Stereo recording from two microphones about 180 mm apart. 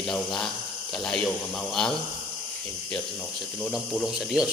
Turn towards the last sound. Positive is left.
turn(degrees=-5)  # may be behind; listen again after turning